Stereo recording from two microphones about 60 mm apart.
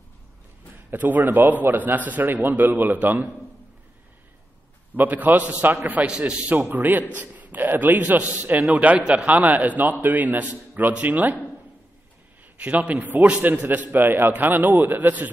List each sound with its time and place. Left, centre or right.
0.7 s a man's voice: right
4.9 s a man's voice: right
6.5 s a man's voice: right
12.5 s a man's voice: right